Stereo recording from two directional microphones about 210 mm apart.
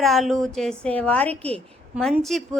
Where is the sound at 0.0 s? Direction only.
Centre (ahead or behind).